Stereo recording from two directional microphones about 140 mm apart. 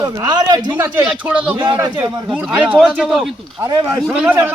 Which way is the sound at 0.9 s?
10° right (ahead or behind).